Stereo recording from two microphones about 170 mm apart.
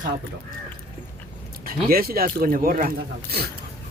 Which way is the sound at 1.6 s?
60° right (ahead or behind).